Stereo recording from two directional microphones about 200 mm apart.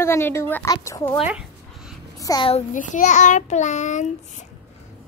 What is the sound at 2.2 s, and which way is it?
Speech, 20° left (ahead or behind).